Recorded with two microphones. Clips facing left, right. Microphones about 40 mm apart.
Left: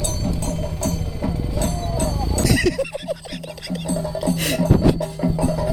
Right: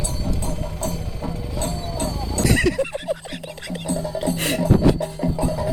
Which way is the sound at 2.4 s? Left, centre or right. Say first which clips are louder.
Even; right.